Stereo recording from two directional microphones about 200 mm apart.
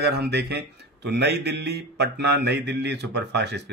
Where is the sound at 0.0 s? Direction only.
55° right (ahead or behind).